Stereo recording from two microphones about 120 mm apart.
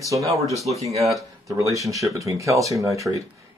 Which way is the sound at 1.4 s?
25° right (ahead or behind).